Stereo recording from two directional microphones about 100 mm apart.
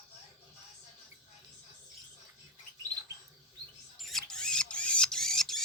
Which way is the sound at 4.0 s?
Centre (ahead or behind).